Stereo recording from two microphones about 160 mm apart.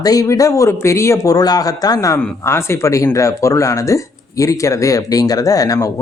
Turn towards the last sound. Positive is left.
turn(degrees=20)  # may be behind; listen again after turning